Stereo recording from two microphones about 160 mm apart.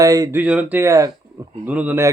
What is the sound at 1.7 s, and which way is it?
Speech, 10° right (ahead or behind).